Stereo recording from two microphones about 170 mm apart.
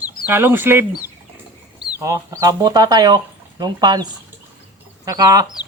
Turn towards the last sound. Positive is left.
turn(degrees=-25)  # may be behind; listen again after turning